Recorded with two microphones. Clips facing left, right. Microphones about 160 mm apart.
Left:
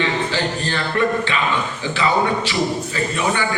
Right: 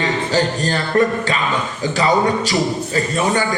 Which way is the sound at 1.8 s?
40° right (ahead or behind).